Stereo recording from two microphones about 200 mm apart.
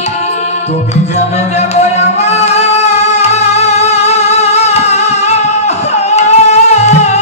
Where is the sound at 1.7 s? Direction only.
35° left (ahead or behind).